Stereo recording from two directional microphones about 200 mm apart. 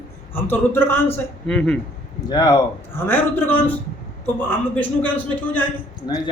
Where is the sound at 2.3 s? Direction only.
20° left (ahead or behind).